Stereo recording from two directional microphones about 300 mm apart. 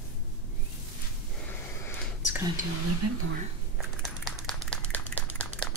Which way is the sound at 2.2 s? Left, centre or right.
Centre.